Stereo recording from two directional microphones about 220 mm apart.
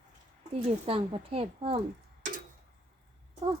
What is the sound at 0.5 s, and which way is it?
Speech, 25° right (ahead or behind).